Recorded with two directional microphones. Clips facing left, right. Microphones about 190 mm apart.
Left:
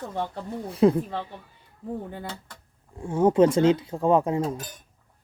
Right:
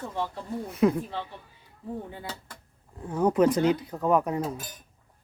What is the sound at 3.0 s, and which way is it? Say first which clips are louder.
Speech: left 3 dB; 25° left (ahead or behind).